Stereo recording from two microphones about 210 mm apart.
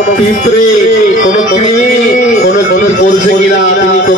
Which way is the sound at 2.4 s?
40° left (ahead or behind).